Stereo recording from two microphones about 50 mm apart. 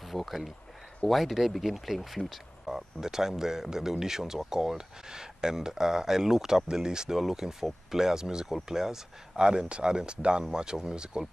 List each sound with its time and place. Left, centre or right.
0.0 s speech: centre